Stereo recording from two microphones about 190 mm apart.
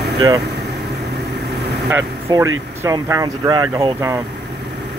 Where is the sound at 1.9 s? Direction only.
15° right (ahead or behind).